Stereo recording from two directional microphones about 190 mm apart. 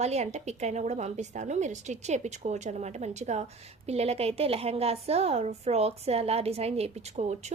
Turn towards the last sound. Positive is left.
turn(degrees=-35)  # may be behind; listen again after turning